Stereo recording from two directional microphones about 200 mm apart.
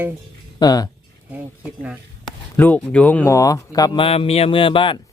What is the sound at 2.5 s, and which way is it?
Speech, 10° left (ahead or behind).